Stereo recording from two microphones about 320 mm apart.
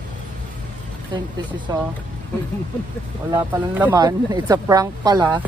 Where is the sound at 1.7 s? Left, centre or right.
Centre.